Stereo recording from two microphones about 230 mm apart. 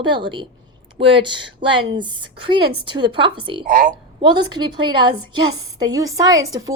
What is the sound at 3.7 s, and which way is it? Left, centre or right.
Speech, right.